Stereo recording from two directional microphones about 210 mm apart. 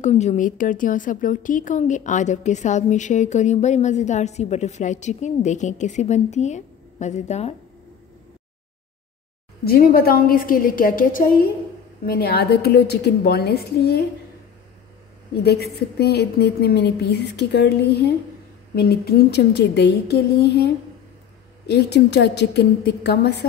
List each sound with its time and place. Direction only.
0.0 s a woman's voice: 35° left (ahead or behind)
9.7 s a woman's voice: 45° left (ahead or behind)
15.4 s a woman's voice: 50° left (ahead or behind)